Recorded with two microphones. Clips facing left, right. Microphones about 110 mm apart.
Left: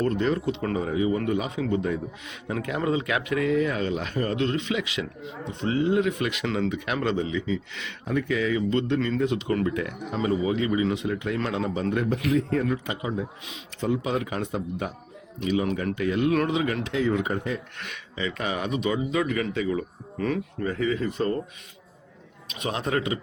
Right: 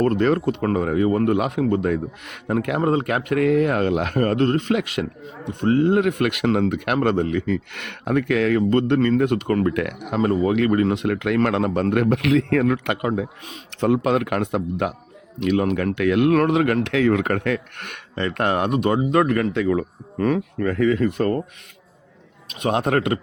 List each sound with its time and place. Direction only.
0.0 s speech: 55° right (ahead or behind)
22.6 s speech: 60° right (ahead or behind)